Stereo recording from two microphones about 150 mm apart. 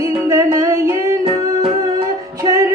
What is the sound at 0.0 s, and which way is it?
Music, 20° right (ahead or behind).